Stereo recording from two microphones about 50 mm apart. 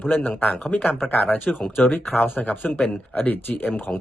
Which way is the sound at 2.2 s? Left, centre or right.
Left.